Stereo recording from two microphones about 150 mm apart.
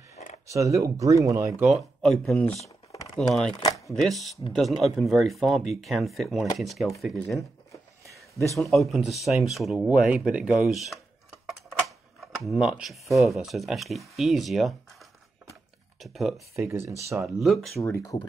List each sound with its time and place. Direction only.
0.1 s a sound: 55° left (ahead or behind)
0.5 s speech: 20° right (ahead or behind)
1.7 s speech: centre (ahead or behind)
8.5 s speech: centre (ahead or behind)
12.2 s speech: 5° right (ahead or behind)
16.0 s speech: centre (ahead or behind)
16.5 s speech: 20° right (ahead or behind)
17.2 s speech: centre (ahead or behind)
17.8 s speech: 15° left (ahead or behind)